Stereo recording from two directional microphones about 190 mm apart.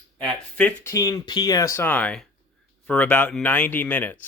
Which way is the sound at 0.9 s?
20° left (ahead or behind).